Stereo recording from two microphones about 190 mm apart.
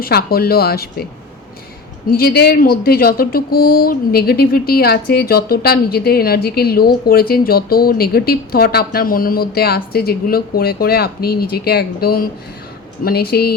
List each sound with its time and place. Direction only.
0.0 s speech: 55° left (ahead or behind)
2.0 s speech: 50° left (ahead or behind)